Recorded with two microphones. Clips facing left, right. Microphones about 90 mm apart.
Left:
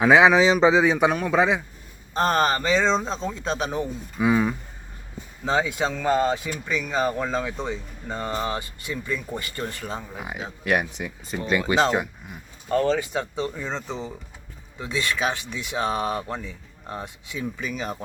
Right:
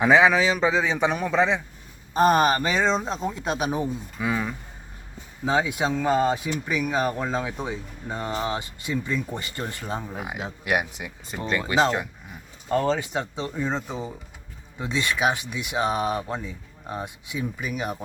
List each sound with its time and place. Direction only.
0.1 s speech: 15° left (ahead or behind)
2.1 s speech: 10° right (ahead or behind)
4.2 s speech: 15° left (ahead or behind)
5.5 s speech: 15° right (ahead or behind)
10.2 s speech: 5° right (ahead or behind)
11.9 s speech: 10° left (ahead or behind)
12.7 s speech: 20° right (ahead or behind)
14.8 s speech: 20° right (ahead or behind)